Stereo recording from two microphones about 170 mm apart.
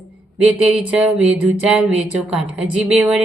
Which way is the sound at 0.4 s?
5° right (ahead or behind).